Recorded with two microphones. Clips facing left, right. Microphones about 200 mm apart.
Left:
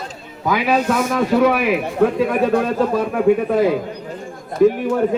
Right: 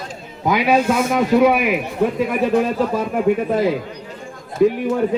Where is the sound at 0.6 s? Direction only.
15° right (ahead or behind).